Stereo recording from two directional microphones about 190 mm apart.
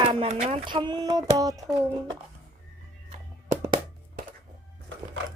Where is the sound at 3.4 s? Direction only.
40° right (ahead or behind).